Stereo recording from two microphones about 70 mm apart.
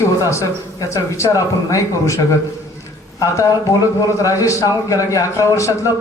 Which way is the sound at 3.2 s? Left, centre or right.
Left.